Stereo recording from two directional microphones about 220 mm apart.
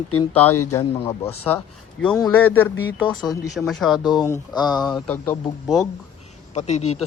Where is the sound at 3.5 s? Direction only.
Centre (ahead or behind).